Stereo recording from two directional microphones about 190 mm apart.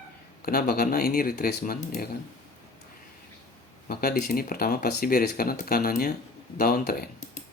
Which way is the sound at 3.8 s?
55° left (ahead or behind).